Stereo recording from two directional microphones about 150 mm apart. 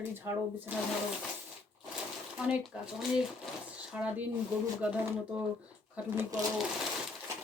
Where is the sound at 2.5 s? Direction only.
5° right (ahead or behind).